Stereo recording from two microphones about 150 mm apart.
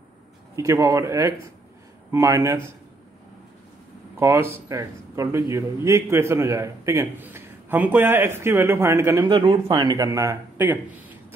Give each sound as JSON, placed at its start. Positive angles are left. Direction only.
{"t": 0.6, "sound": "speech", "side_deg": -25}
{"t": 4.2, "sound": "a man's voice", "side_deg": -20}
{"t": 9.2, "sound": "speech", "side_deg": -35}